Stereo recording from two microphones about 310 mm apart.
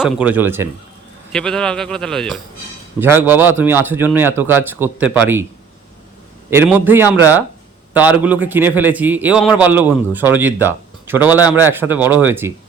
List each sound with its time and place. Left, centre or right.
0.0 s a man's voice: centre
6.5 s a man's voice: centre